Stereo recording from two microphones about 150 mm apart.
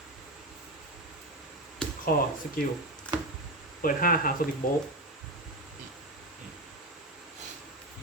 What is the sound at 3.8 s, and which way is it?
Speech, 70° left (ahead or behind).